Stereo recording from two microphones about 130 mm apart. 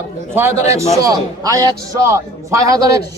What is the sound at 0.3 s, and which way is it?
A man's voice, 20° right (ahead or behind).